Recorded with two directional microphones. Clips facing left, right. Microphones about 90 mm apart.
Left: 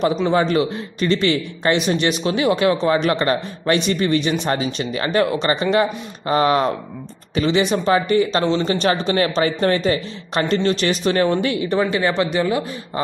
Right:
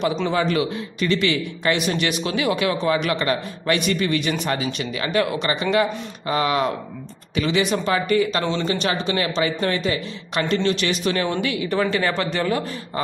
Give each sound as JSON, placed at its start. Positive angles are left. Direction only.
{"t": 0.3, "sound": "speech", "side_deg": 30}
{"t": 8.6, "sound": "speech", "side_deg": 40}
{"t": 11.7, "sound": "a man's voice", "side_deg": 20}